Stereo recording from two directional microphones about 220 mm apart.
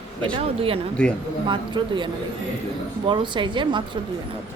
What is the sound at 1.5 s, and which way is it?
A woman's voice, 20° right (ahead or behind).